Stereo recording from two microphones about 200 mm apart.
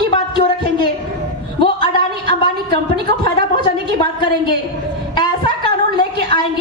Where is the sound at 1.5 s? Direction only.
25° left (ahead or behind).